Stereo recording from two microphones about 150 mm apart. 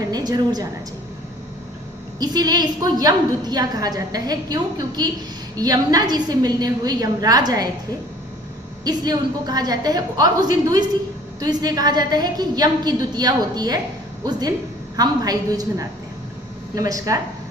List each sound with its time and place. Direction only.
0.0 s a woman's voice: 25° right (ahead or behind)
2.1 s a woman's voice: 25° right (ahead or behind)
8.8 s a woman's voice: 25° right (ahead or behind)
11.3 s a woman's voice: 25° right (ahead or behind)